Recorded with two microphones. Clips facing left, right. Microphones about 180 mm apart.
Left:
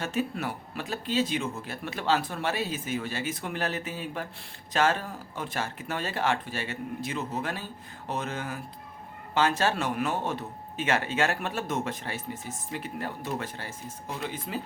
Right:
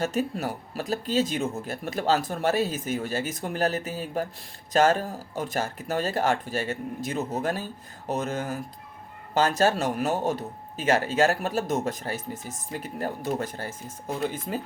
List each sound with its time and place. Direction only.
0.0 s speech: 40° right (ahead or behind)